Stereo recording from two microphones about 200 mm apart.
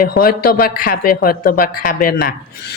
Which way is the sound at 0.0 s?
45° left (ahead or behind).